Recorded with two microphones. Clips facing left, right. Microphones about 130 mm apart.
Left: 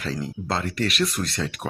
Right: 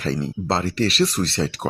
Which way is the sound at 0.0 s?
35° right (ahead or behind).